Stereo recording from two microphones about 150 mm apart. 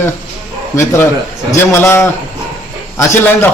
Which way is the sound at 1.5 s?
15° left (ahead or behind).